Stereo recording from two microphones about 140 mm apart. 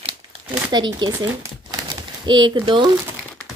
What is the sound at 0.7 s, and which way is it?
Speech, 30° right (ahead or behind).